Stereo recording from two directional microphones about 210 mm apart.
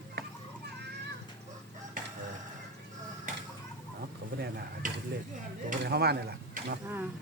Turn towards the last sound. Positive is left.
turn(degrees=-10)  # may be behind; listen again after turning